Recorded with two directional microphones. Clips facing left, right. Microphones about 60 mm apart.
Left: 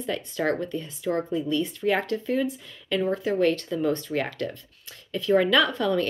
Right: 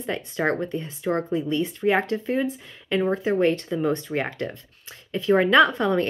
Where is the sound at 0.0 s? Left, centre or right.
Right.